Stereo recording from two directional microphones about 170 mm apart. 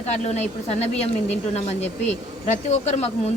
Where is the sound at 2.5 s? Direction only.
40° left (ahead or behind).